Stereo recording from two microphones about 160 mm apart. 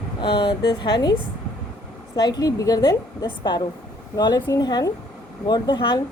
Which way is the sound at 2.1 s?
25° left (ahead or behind).